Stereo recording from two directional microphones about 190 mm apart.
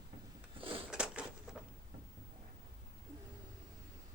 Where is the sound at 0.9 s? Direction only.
5° right (ahead or behind).